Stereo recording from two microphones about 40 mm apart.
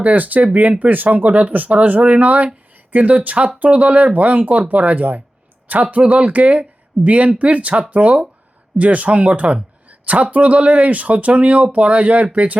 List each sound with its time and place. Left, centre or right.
0.0 s speech: right